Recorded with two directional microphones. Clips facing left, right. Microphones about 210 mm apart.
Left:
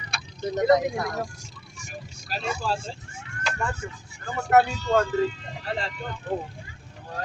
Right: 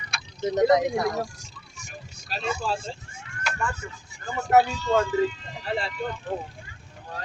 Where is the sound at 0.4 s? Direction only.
20° right (ahead or behind).